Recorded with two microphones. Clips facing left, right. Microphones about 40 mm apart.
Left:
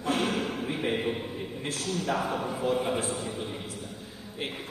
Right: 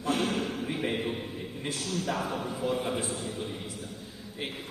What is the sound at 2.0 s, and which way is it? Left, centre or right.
Speech, centre.